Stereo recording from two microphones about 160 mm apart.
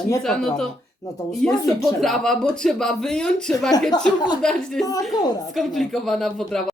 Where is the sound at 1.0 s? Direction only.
20° left (ahead or behind).